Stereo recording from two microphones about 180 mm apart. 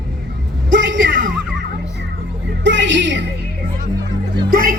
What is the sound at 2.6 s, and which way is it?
Music, 90° right.